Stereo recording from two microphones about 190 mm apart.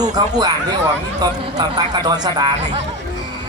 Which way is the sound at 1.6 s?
20° right (ahead or behind).